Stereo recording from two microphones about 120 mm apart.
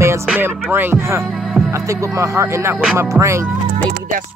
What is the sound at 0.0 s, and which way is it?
Music, 20° right (ahead or behind).